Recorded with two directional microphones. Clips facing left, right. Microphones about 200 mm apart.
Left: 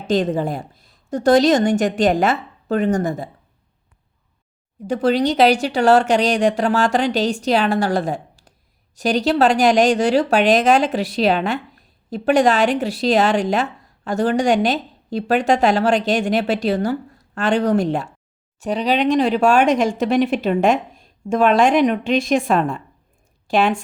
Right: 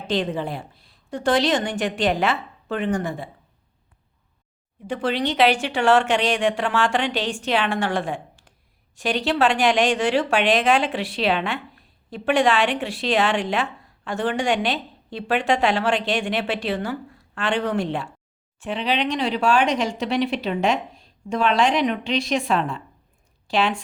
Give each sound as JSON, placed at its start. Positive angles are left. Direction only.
{"t": 0.1, "sound": "speech", "side_deg": 45}
{"t": 4.9, "sound": "speech", "side_deg": 40}